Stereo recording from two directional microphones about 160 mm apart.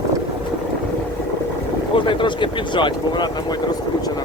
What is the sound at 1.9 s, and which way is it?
Speech, 30° left (ahead or behind).